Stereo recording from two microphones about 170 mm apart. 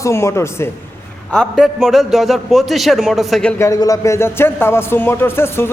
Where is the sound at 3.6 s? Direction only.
20° left (ahead or behind).